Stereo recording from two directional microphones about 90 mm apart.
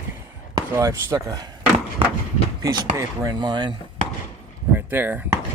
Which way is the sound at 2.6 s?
45° right (ahead or behind).